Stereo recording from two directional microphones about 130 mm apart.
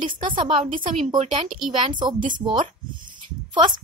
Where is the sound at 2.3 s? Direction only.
35° right (ahead or behind).